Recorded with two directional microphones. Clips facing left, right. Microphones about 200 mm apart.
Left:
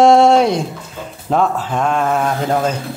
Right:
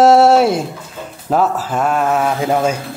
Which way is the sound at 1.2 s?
5° right (ahead or behind).